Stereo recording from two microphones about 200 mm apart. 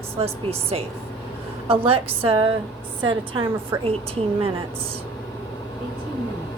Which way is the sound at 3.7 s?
15° right (ahead or behind).